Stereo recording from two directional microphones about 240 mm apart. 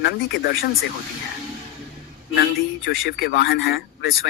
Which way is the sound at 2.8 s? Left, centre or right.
Left.